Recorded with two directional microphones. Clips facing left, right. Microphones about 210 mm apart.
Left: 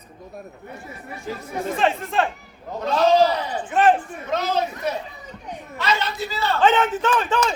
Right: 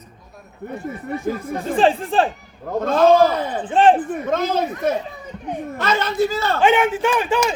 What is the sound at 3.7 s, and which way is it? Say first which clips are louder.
Speech: right 3 dB; 30° right (ahead or behind).